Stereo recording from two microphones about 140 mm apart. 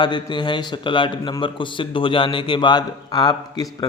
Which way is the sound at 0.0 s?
35° left (ahead or behind).